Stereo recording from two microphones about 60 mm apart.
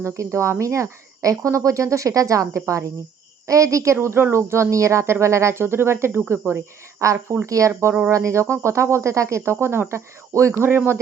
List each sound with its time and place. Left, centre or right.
0.0 s speech: right
4.0 s speech: right
9.4 s speech: right
10.6 s speech: right